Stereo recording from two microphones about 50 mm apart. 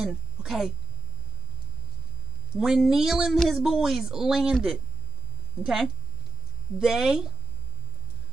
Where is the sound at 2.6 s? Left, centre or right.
Centre.